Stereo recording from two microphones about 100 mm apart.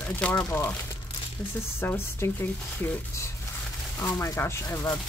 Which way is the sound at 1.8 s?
25° left (ahead or behind).